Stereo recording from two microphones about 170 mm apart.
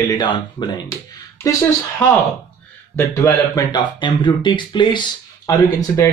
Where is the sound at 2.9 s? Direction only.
15° left (ahead or behind).